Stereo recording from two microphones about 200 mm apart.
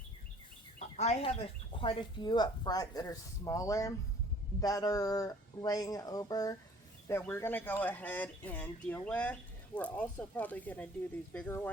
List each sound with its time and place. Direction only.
0.8 s speech: 35° left (ahead or behind); by 11.7 s 10° left (ahead or behind)